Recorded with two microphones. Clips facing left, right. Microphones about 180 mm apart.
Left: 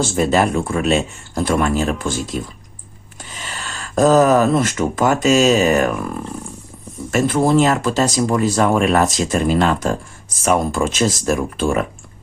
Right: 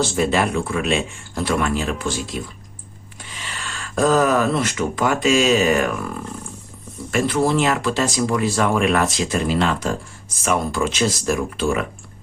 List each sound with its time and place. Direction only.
0.0 s speech: 40° left (ahead or behind)
7.1 s speech: 45° left (ahead or behind)